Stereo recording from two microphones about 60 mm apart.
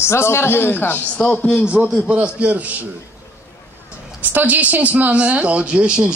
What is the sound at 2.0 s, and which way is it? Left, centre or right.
Speech, right.